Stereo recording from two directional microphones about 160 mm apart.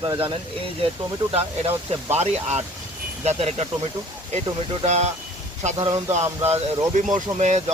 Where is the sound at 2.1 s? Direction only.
45° right (ahead or behind).